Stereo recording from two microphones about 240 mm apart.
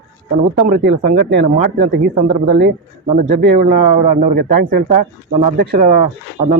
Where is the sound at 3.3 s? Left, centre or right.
Right.